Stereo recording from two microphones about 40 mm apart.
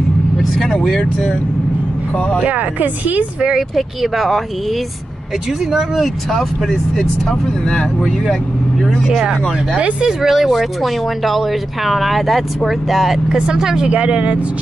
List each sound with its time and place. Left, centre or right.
0.4 s vehicle: centre
2.1 s speech: left
2.4 s speech: right
3.7 s speech: centre
5.7 s speech: centre
6.3 s speech: centre
7.2 s speech: centre
9.8 s speech: right
10.0 s speech: centre
13.3 s speech: centre
13.8 s speech: right